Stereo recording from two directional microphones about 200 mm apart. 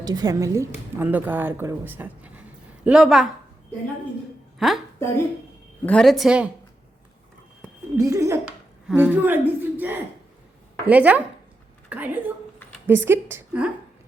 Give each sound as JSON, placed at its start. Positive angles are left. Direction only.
{"t": 0.0, "sound": "a woman's voice", "side_deg": -20}
{"t": 4.6, "sound": "a woman's voice", "side_deg": 0}
{"t": 5.8, "sound": "a woman's voice", "side_deg": 5}
{"t": 7.9, "sound": "a woman's voice", "side_deg": -15}